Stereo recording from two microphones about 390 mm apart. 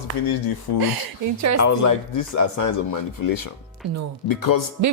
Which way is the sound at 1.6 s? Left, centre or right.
Left.